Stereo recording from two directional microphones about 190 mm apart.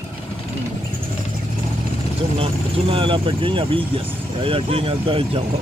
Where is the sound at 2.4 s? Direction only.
30° right (ahead or behind).